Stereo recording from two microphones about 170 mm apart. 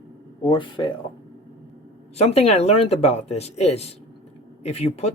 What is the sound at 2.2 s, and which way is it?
Speech, 35° left (ahead or behind).